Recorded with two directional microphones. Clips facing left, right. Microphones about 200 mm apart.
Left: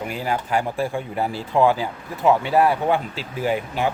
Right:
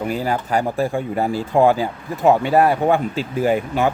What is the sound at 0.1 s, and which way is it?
Speech, 40° right (ahead or behind).